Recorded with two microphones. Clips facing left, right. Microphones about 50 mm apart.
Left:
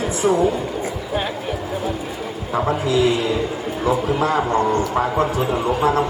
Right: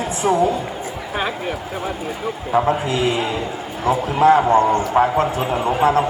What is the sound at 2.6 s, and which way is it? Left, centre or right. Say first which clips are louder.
A man's voice: left 1 dB; right.